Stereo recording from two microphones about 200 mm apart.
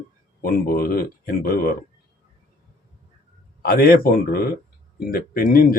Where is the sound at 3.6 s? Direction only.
50° left (ahead or behind).